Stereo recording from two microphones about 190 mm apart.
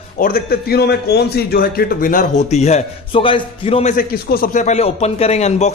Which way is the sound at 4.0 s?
55° left (ahead or behind).